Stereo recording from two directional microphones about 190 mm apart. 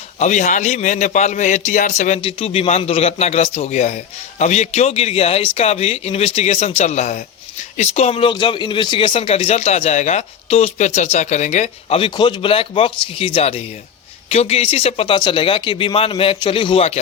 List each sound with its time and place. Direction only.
0.2 s a man's voice: 40° left (ahead or behind)